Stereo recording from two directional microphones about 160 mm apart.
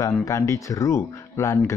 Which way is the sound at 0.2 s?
20° left (ahead or behind).